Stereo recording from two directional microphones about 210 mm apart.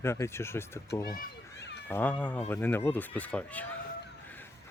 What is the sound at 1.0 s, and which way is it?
Speech, 45° left (ahead or behind).